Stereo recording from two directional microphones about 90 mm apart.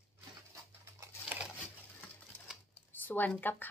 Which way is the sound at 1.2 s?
10° right (ahead or behind).